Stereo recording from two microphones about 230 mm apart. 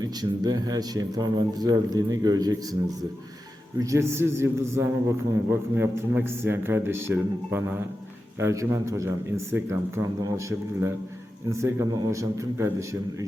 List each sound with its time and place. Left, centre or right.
0.0 s a man's voice: centre
3.8 s a man's voice: centre